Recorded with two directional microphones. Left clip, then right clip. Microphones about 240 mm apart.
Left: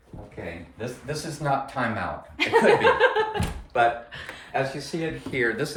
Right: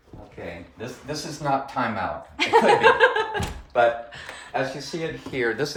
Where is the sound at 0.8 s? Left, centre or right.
Centre.